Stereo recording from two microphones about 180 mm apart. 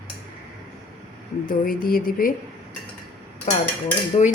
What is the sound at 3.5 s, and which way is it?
Speech, 45° left (ahead or behind).